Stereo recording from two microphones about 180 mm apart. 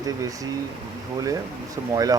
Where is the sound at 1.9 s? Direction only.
20° right (ahead or behind).